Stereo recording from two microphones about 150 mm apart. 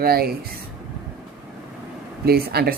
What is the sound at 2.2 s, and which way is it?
Speech, 90° right.